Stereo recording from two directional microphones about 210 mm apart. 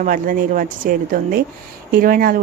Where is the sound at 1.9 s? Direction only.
40° right (ahead or behind).